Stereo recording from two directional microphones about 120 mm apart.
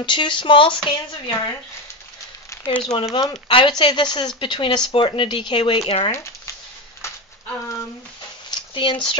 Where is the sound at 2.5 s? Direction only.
15° left (ahead or behind).